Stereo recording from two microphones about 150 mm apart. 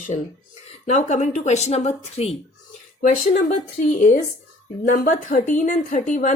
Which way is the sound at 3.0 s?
55° left (ahead or behind).